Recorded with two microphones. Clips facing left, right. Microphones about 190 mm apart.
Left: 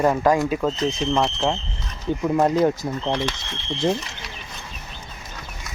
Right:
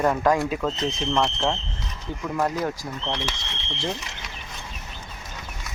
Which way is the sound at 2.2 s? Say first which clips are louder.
Left 7 dB; 25° left (ahead or behind).